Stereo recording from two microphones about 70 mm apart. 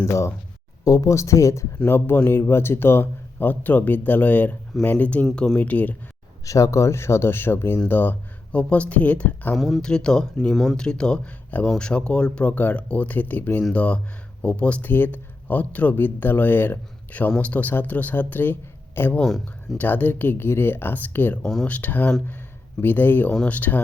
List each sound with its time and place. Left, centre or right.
0.0 s speech: left
0.9 s speech: left
1.9 s speech: left
6.4 s speech: left
9.6 s speech: centre
9.8 s speech: centre
10.8 s speech: centre; by 21.3 s left
21.4 s speech: centre
21.7 s speech: left